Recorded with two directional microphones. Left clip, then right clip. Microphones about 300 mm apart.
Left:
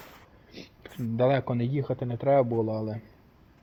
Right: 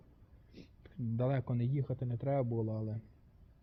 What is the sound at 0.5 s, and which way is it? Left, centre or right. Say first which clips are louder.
Speech: left 12 dB; centre.